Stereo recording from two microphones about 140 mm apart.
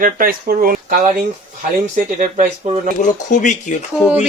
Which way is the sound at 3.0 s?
60° left (ahead or behind).